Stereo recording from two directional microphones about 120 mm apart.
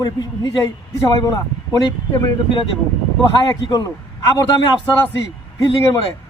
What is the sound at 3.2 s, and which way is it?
Speech, 40° left (ahead or behind).